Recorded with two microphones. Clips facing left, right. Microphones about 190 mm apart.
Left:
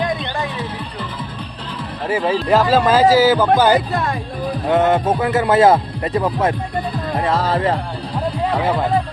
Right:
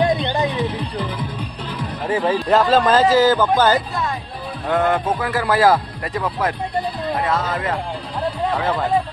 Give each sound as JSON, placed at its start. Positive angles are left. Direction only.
{"t": 0.0, "sound": "music", "side_deg": -20}
{"t": 2.0, "sound": "speech", "side_deg": 10}
{"t": 4.6, "sound": "speech", "side_deg": 20}
{"t": 8.5, "sound": "speech", "side_deg": 15}